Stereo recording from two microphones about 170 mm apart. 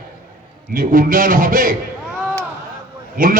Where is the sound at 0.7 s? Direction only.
55° right (ahead or behind).